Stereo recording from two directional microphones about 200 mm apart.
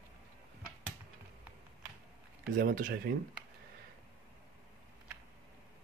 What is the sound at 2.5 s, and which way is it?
Speech, 55° right (ahead or behind).